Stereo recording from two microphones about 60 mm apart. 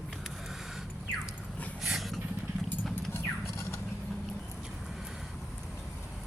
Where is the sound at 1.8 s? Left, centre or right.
Centre.